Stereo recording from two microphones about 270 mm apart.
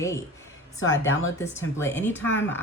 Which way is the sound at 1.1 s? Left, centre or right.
Left.